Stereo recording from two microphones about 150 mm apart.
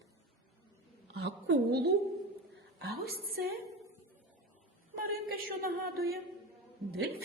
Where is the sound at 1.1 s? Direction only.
90° right.